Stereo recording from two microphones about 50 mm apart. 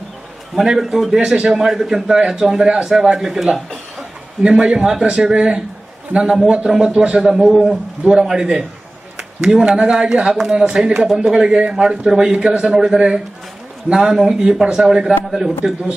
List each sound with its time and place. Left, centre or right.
0.5 s a man's voice: centre